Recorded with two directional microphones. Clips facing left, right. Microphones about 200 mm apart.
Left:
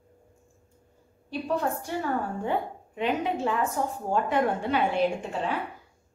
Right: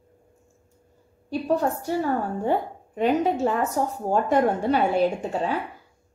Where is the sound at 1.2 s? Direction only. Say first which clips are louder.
Right 5 dB; 40° right (ahead or behind).